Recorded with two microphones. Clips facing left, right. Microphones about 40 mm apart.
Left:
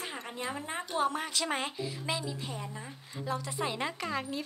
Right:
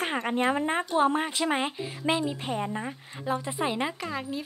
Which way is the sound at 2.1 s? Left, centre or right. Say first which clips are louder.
Right 11 dB; right.